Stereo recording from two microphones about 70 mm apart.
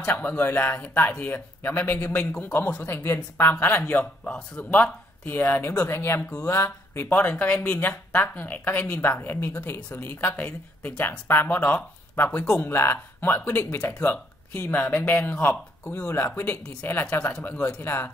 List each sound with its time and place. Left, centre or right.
0.0 s speech: left
4.2 s speech: left
7.6 s speech: left
17.0 s speech: centre
17.4 s speech: left